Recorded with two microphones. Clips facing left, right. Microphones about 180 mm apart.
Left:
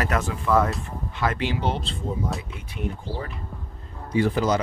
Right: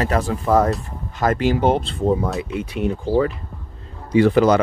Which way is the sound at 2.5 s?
90° right.